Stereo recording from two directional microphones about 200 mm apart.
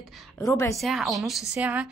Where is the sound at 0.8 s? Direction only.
Centre (ahead or behind).